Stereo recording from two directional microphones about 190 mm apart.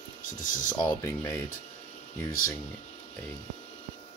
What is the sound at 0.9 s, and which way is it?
Speech, 15° left (ahead or behind).